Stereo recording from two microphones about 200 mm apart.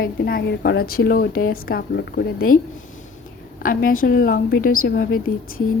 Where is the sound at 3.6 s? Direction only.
45° left (ahead or behind).